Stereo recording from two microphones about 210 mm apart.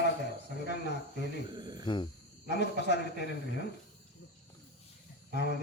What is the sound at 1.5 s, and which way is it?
Speech, 20° right (ahead or behind).